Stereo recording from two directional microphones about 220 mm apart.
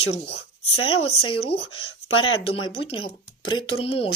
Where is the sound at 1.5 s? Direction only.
30° left (ahead or behind).